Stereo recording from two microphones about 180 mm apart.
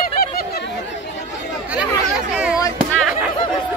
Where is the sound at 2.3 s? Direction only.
5° right (ahead or behind).